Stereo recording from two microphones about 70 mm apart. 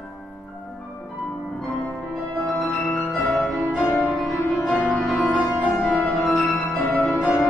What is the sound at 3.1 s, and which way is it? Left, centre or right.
Music, centre.